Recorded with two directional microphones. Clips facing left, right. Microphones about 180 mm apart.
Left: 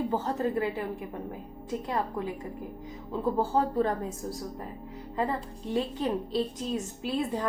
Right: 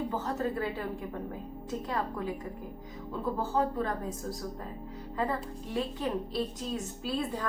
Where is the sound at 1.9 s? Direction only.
20° left (ahead or behind).